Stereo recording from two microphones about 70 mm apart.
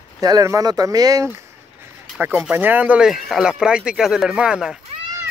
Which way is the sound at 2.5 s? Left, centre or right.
Right.